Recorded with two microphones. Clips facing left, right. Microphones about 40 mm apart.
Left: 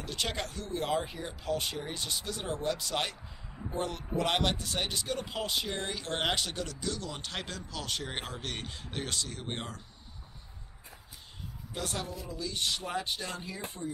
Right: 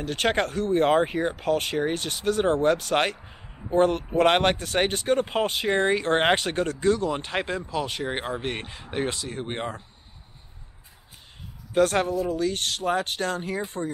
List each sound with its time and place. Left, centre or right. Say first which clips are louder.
0.0 s speech: right 11 dB; right
11.7 s speech: right 16 dB; right